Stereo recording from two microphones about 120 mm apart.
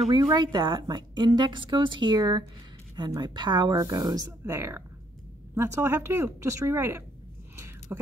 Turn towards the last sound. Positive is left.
turn(degrees=-20)  # may be behind; listen again after turning